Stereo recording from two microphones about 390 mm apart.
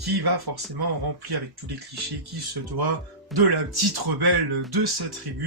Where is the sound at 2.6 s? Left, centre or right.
Right.